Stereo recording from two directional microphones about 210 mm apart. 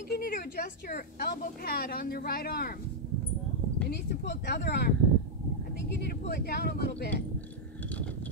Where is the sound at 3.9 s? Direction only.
55° left (ahead or behind).